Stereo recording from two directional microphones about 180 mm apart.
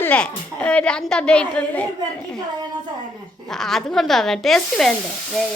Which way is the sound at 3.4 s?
Centre (ahead or behind).